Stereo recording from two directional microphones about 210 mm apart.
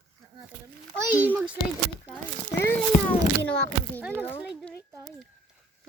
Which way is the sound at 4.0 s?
10° right (ahead or behind).